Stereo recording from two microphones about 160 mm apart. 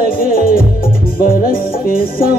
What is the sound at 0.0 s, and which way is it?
Music, 65° left (ahead or behind).